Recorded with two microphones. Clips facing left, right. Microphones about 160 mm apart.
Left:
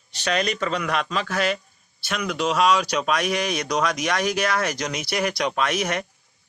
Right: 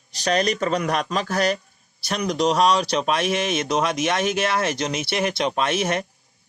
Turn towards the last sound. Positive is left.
turn(degrees=-25)  # may be behind; listen again after turning